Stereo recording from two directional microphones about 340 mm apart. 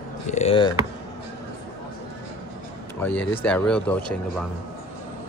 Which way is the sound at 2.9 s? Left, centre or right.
Centre.